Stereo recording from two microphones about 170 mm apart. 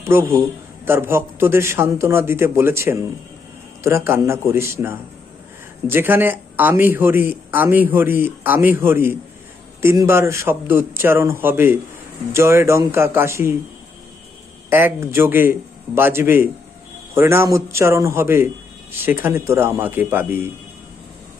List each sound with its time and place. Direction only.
0.0 s a man's voice: 15° right (ahead or behind)
14.7 s a man's voice: 15° right (ahead or behind)